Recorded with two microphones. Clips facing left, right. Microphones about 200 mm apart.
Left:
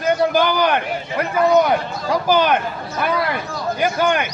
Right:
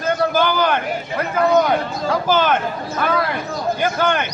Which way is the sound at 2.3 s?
15° left (ahead or behind).